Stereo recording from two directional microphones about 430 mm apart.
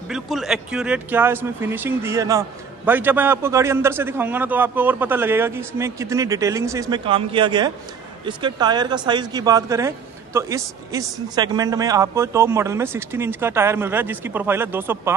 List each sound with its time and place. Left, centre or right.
0.1 s a man's voice: centre